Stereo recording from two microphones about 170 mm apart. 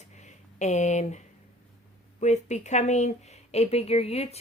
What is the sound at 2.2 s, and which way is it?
Speech, 45° left (ahead or behind).